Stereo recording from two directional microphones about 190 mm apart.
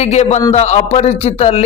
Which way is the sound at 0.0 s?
35° left (ahead or behind).